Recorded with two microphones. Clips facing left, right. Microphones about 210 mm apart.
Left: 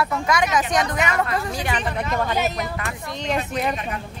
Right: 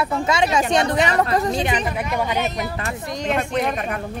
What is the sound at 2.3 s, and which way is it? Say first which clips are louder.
A woman's voice: even; centre (ahead or behind).